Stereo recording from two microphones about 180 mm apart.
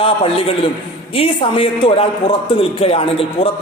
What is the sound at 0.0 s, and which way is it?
A man's voice, 30° left (ahead or behind).